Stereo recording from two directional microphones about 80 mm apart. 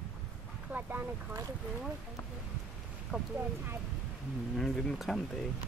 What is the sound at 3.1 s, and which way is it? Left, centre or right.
Speech, centre.